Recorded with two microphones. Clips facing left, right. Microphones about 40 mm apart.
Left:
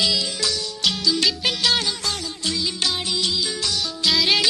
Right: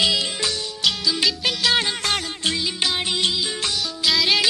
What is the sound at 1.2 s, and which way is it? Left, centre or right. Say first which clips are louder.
Music: even; centre.